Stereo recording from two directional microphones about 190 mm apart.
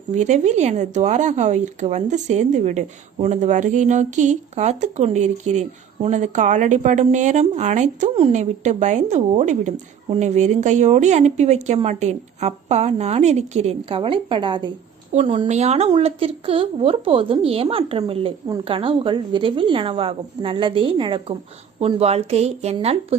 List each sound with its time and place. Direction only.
0.1 s speech: 40° right (ahead or behind)
15.1 s a woman's voice: 35° right (ahead or behind)